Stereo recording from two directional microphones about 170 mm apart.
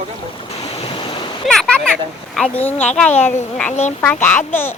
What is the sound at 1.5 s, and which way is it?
A child's voice, 5° left (ahead or behind).